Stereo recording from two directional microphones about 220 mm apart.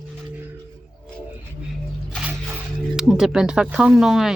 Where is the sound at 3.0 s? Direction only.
Centre (ahead or behind).